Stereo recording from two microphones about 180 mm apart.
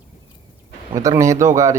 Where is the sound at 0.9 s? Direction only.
15° right (ahead or behind).